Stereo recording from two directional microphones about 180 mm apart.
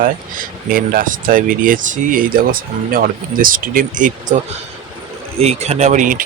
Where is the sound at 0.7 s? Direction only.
50° right (ahead or behind).